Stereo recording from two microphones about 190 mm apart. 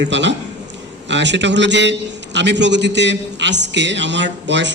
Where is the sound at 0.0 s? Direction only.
70° right (ahead or behind).